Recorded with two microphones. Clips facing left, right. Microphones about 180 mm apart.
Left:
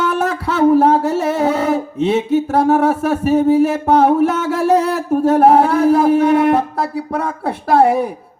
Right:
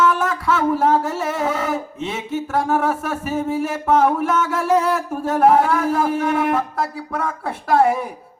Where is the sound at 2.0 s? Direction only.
35° left (ahead or behind).